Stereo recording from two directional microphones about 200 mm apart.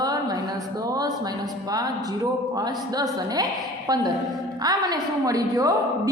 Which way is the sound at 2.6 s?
20° right (ahead or behind).